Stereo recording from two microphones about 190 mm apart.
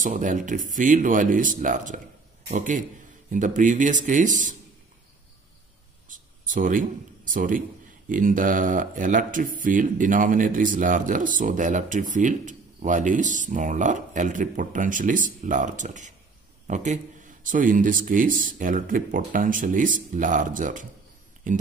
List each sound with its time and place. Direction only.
0.0 s speech: 40° right (ahead or behind)
6.0 s a sound: 45° right (ahead or behind)
8.1 s speech: 45° right (ahead or behind)